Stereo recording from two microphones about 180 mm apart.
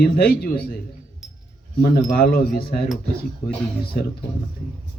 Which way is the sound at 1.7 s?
60° left (ahead or behind).